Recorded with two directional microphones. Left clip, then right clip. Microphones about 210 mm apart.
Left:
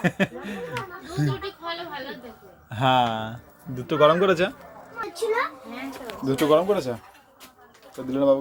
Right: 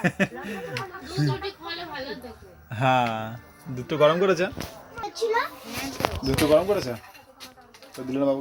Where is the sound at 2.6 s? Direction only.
5° left (ahead or behind).